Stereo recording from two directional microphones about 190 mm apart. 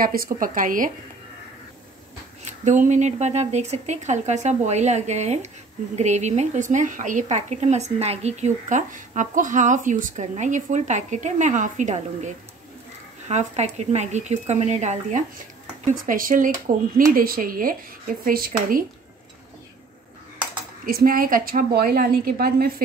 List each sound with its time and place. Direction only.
0.0 s speech: 50° right (ahead or behind)
2.4 s a woman's voice: 40° right (ahead or behind)
13.3 s a woman's voice: 35° right (ahead or behind)
20.8 s speech: 50° right (ahead or behind)